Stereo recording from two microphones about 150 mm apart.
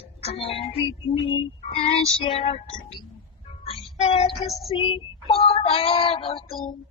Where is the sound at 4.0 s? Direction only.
40° left (ahead or behind).